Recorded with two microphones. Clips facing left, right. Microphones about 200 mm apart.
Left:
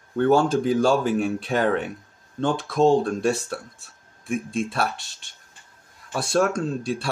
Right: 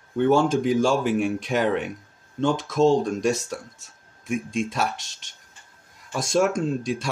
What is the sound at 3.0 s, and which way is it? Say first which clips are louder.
Speech: even; 15° right (ahead or behind).